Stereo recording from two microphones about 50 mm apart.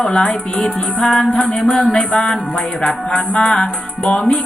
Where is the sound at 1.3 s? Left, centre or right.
Left.